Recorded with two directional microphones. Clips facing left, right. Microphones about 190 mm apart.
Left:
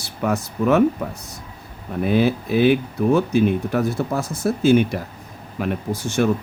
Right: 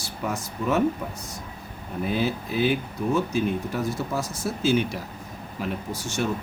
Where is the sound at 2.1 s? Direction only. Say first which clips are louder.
Left 8 dB; 65° left (ahead or behind).